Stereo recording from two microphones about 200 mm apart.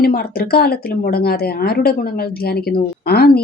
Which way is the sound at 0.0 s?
50° left (ahead or behind).